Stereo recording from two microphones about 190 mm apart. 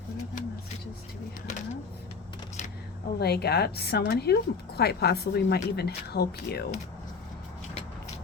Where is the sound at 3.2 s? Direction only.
55° left (ahead or behind).